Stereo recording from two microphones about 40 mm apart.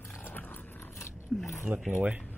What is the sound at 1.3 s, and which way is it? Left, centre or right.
Speech, centre.